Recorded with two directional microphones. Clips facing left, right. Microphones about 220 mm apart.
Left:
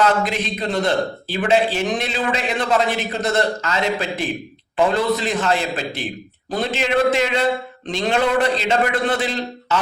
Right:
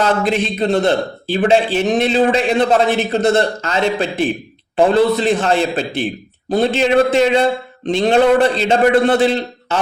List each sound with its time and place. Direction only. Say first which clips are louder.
0.0 s a man's voice: right 3 dB; 30° right (ahead or behind)